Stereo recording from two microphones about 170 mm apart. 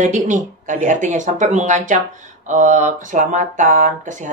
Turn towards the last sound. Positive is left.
turn(degrees=-45)  # may be behind; listen again after turning